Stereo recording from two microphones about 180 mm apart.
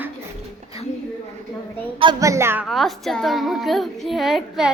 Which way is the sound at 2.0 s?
20° right (ahead or behind).